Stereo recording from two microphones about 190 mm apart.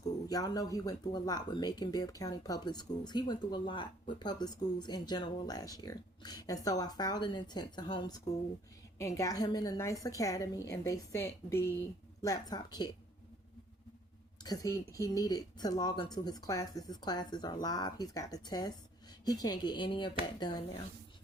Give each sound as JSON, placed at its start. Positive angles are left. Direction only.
{"t": 0.0, "sound": "a woman's voice", "side_deg": 20}
{"t": 14.4, "sound": "speech", "side_deg": 20}